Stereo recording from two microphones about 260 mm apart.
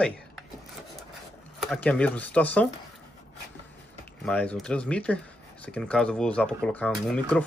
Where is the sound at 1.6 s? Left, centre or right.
Centre.